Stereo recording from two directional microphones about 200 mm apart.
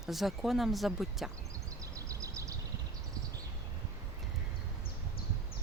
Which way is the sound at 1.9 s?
15° right (ahead or behind).